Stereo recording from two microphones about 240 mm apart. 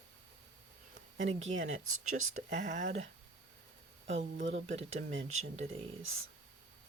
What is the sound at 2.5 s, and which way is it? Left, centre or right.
Speech, right.